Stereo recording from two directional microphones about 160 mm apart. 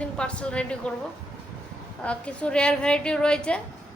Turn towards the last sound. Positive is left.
turn(degrees=5)  # may be behind; listen again after turning